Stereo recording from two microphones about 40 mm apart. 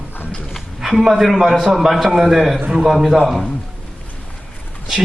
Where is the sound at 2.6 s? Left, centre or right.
Right.